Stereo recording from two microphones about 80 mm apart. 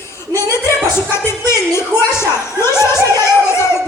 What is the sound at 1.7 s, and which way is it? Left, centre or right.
Speech, left.